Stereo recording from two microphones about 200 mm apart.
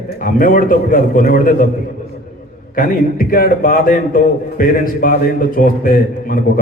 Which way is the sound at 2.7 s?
45° left (ahead or behind).